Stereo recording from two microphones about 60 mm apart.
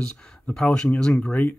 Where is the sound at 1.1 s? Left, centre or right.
Left.